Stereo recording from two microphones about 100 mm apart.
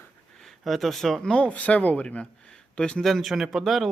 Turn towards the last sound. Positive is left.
turn(degrees=0)  # may be behind; listen again after turning